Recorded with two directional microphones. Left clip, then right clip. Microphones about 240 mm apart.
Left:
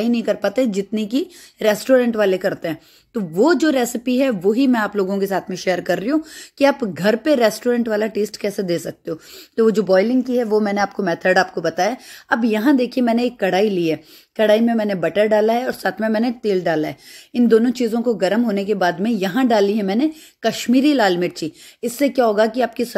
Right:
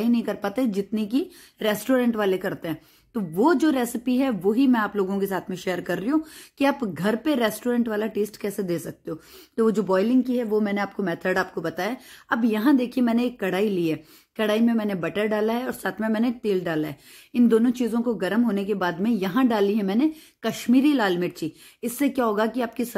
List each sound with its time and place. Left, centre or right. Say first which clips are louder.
0.0 s a woman's voice: left 6 dB; centre